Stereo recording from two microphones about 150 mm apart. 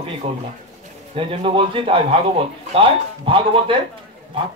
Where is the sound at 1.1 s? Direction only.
35° right (ahead or behind).